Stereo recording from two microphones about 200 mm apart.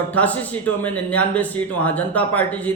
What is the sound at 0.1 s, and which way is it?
Speech, 5° left (ahead or behind).